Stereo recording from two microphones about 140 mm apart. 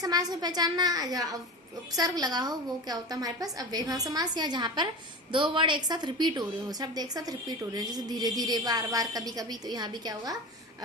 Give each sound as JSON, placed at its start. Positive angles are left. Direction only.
{"t": 0.0, "sound": "a woman's voice", "side_deg": -25}